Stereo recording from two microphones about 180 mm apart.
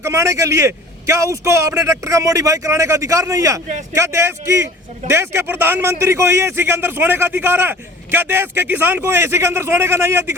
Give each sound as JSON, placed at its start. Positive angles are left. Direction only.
{"t": 0.0, "sound": "a man's voice", "side_deg": -15}